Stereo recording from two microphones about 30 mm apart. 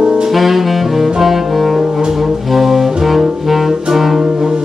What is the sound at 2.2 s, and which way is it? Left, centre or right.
Brass instrument, centre.